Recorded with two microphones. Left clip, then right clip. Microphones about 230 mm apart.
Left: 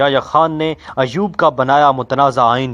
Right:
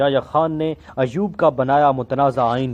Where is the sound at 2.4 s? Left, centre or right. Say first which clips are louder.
Left 6 dB; left.